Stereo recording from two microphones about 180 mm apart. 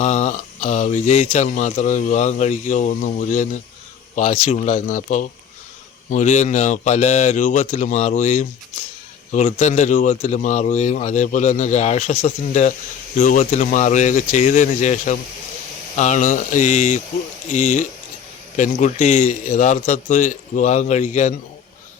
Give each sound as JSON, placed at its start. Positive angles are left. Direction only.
{"t": 0.0, "sound": "a man's voice", "side_deg": 40}